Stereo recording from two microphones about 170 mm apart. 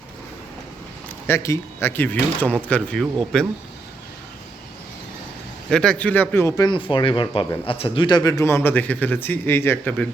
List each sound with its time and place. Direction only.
1.0 s speech: 15° left (ahead or behind)
5.7 s a man's voice: 5° left (ahead or behind)
6.7 s a man's voice: 30° left (ahead or behind); by 10.1 s 10° left (ahead or behind)